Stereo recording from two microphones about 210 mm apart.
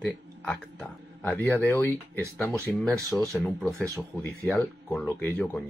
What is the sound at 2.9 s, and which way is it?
Speech, 15° right (ahead or behind).